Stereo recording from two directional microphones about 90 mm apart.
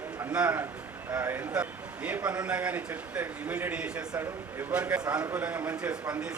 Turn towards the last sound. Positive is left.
turn(degrees=-15)  # may be behind; listen again after turning